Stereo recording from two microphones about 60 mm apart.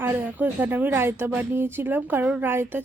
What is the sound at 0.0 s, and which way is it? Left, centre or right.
A woman's voice, right.